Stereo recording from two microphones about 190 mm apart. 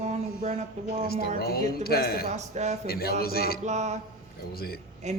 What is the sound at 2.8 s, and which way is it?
Speech, 55° left (ahead or behind).